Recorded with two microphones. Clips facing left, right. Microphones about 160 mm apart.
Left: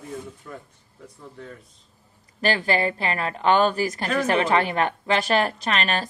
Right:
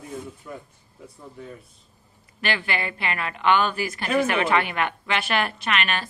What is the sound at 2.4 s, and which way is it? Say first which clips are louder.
A woman's voice: left 5 dB; 35° left (ahead or behind).